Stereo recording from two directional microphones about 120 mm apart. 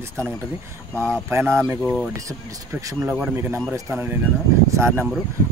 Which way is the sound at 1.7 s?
15° right (ahead or behind).